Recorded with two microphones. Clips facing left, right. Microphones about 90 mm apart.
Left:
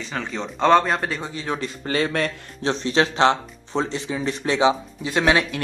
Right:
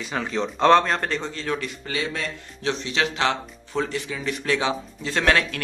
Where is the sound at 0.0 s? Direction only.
5° right (ahead or behind); by 1.6 s 10° left (ahead or behind).